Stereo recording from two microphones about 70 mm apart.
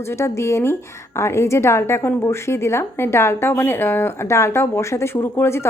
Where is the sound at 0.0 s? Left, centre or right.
Left.